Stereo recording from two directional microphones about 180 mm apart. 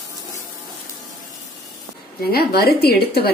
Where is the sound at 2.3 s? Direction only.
60° left (ahead or behind).